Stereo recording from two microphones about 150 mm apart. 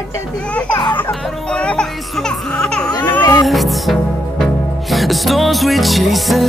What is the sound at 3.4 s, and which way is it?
Music, centre (ahead or behind).